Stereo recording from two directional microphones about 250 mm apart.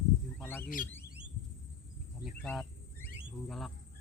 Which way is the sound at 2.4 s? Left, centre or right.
Centre.